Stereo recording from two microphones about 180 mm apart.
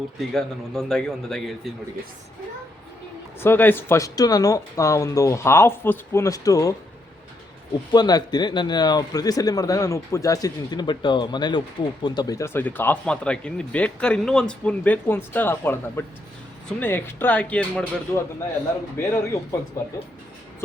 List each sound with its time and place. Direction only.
0.3 s a man's voice: centre (ahead or behind)
3.4 s speech: 10° left (ahead or behind)
7.9 s speech: 20° left (ahead or behind)